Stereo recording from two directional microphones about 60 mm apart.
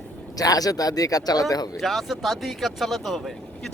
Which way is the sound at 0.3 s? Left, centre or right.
Left.